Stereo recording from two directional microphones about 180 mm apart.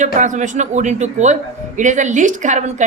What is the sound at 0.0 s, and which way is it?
A man's voice, 45° right (ahead or behind).